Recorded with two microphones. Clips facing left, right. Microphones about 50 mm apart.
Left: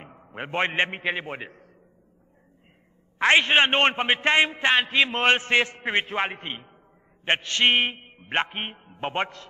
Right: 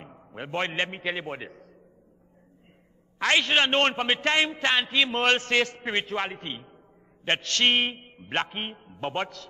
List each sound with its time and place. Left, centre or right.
0.3 s a man's voice: left
3.2 s a man's voice: left
4.7 s a man's voice: centre
5.2 s a man's voice: left